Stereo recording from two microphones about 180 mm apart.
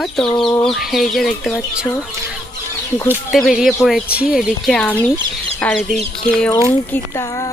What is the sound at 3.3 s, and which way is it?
Speech, centre (ahead or behind).